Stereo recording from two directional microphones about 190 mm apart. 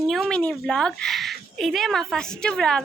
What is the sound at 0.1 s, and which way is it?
Speech, centre (ahead or behind).